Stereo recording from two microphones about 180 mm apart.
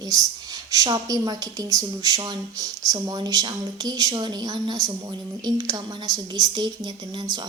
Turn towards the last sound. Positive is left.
turn(degrees=-25)  # may be behind; listen again after turning